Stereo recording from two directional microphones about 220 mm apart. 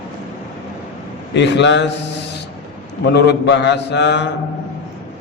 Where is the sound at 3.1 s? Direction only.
50° left (ahead or behind).